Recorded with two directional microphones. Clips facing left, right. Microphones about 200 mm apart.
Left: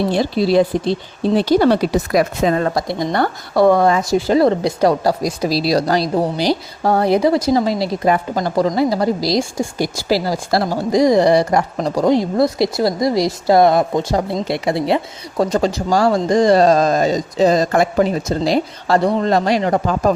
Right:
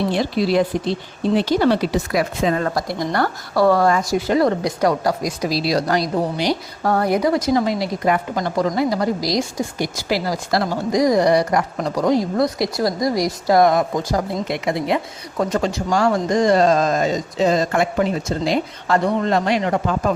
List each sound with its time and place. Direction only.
0.1 s a woman's voice: 30° left (ahead or behind)
2.8 s a woman's voice: 20° left (ahead or behind); by 20.1 s 40° left (ahead or behind)